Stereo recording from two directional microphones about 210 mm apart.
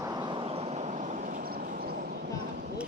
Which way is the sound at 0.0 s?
20° right (ahead or behind).